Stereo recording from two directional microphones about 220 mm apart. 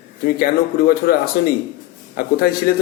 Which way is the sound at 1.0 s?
45° left (ahead or behind).